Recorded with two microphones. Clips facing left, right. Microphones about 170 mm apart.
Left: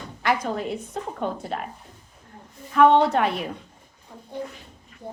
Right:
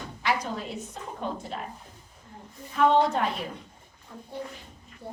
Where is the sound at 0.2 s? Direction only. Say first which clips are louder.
Left 5 dB; 55° left (ahead or behind).